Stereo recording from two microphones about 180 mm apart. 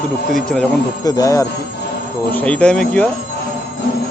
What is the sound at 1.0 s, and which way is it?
Speech, 20° left (ahead or behind).